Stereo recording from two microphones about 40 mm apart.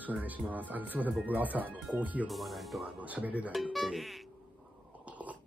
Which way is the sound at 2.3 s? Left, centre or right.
Centre.